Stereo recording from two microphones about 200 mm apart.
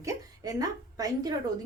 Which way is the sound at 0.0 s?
20° right (ahead or behind).